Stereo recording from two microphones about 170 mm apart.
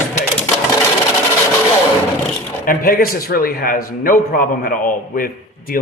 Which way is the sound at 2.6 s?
55° left (ahead or behind).